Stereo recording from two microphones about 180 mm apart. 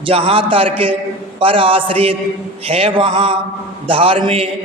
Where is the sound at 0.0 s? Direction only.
30° right (ahead or behind).